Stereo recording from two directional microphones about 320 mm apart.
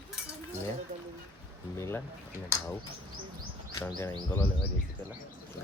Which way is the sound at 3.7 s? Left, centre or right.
Centre.